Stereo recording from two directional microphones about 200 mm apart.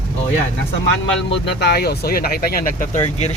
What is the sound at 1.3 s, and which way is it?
Speech, 60° left (ahead or behind).